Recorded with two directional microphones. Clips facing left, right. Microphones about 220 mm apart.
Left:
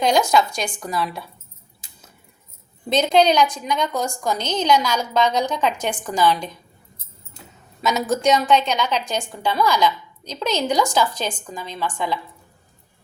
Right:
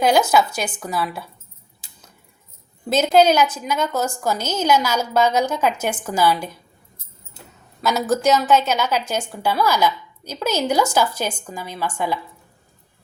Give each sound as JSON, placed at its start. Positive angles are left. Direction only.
{"t": 0.0, "sound": "speech", "side_deg": -5}
{"t": 2.9, "sound": "a woman's voice", "side_deg": -5}
{"t": 7.8, "sound": "a woman's voice", "side_deg": 0}